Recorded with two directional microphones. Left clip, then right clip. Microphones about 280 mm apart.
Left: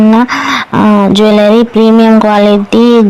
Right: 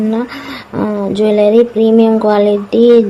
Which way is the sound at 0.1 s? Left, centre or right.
Left.